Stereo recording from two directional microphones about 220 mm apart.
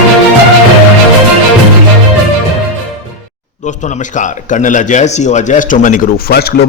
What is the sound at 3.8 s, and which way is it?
Speech, 35° left (ahead or behind).